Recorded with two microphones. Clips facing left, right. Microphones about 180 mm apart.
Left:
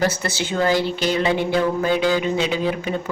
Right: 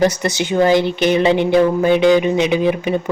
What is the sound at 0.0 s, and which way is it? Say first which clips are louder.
A woman's voice: right 6 dB; 15° right (ahead or behind).